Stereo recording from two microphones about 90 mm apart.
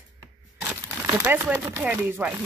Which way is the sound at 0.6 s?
20° right (ahead or behind).